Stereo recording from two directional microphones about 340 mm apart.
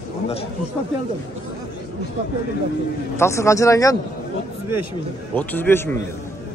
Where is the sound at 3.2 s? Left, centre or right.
Centre.